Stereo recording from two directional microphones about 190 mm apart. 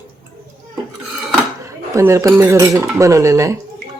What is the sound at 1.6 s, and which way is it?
Speech, 15° right (ahead or behind).